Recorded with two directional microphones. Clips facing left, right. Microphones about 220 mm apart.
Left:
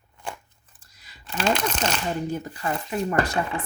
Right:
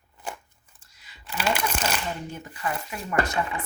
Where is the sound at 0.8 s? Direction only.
40° left (ahead or behind).